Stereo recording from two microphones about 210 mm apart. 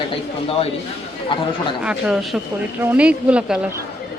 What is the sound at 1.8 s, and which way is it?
Speech, 5° right (ahead or behind).